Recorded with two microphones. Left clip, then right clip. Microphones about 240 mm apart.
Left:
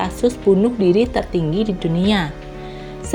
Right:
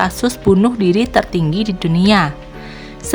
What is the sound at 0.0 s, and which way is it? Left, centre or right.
Speech, right.